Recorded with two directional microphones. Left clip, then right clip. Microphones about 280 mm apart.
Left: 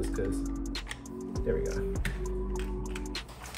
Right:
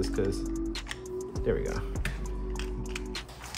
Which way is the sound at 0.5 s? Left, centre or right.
Centre.